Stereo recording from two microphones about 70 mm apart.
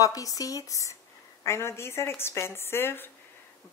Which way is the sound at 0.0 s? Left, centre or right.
Left.